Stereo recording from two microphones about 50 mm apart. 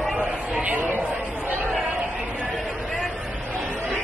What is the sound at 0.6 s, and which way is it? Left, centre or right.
Speech, right.